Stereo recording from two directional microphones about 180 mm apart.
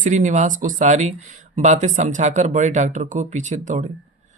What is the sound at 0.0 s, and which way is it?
Speech, 45° right (ahead or behind).